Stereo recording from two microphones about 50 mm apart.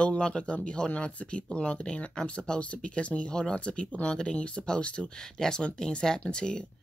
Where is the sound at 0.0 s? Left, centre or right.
Left.